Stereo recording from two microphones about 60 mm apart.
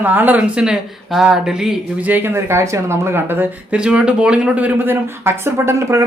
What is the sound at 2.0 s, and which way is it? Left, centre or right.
Speech, right.